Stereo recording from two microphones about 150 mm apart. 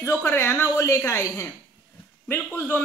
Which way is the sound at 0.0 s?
15° left (ahead or behind).